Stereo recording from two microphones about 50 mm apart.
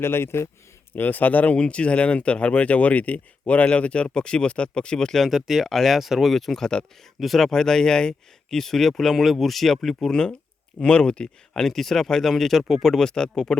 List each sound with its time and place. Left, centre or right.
0.0 s speech: left
0.9 s speech: left
1.5 s speech: left
5.3 s speech: centre